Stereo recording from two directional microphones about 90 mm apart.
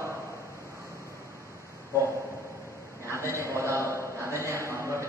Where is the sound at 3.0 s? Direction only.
35° right (ahead or behind).